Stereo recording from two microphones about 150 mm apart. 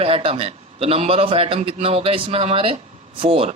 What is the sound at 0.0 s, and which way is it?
Speech, 40° right (ahead or behind).